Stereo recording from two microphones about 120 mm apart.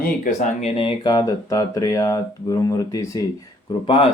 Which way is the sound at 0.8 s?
40° left (ahead or behind).